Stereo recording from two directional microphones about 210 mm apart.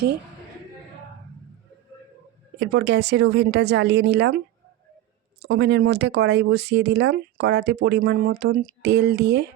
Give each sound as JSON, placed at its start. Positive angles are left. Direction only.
{"t": 2.6, "sound": "speech", "side_deg": -55}